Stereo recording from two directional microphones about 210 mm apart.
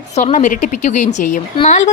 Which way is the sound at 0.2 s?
35° left (ahead or behind).